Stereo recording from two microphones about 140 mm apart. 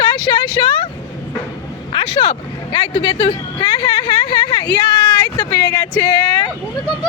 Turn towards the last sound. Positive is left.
turn(degrees=30)  # may be behind; listen again after turning